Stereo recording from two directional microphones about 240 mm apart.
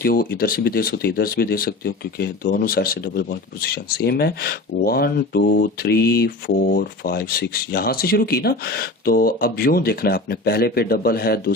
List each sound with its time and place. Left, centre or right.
0.0 s speech: left